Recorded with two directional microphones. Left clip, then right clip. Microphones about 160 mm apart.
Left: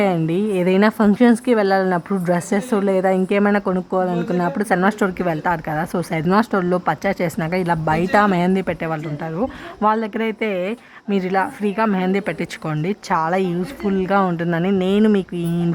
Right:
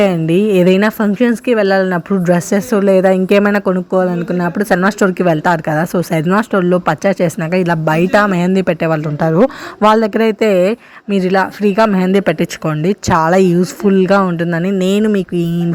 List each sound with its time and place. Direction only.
0.0 s a woman's voice: 20° right (ahead or behind)
9.2 s a woman's voice: 40° right (ahead or behind); by 15.4 s 25° right (ahead or behind)